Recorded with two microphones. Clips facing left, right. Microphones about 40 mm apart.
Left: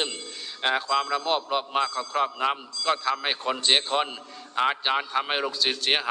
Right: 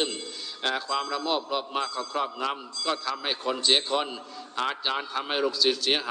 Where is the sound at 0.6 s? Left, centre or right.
Left.